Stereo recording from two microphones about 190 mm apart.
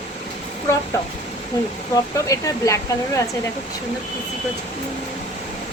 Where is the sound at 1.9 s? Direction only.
15° left (ahead or behind).